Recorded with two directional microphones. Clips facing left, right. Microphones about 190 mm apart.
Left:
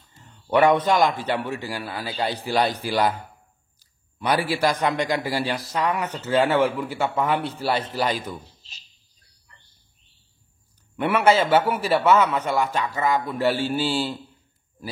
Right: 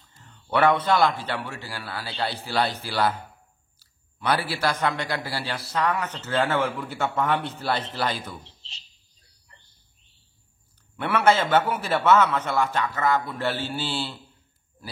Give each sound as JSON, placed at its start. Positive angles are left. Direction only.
{"t": 0.2, "sound": "a man's voice", "side_deg": 15}
{"t": 7.3, "sound": "a man's voice", "side_deg": 35}
{"t": 7.6, "sound": "a man's voice", "side_deg": 10}
{"t": 8.5, "sound": "speech", "side_deg": -30}
{"t": 11.0, "sound": "a man's voice", "side_deg": 10}